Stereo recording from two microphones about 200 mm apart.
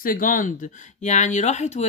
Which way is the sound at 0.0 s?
45° left (ahead or behind).